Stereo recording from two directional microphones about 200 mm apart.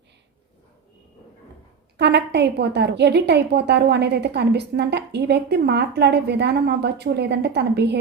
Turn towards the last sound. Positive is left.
turn(degrees=-55)  # may be behind; listen again after turning